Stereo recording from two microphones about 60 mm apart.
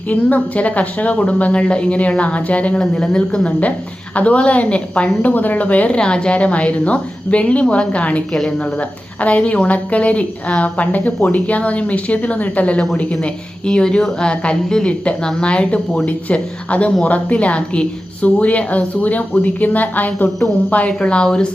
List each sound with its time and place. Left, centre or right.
0.1 s a woman's voice: left
9.2 s a woman's voice: left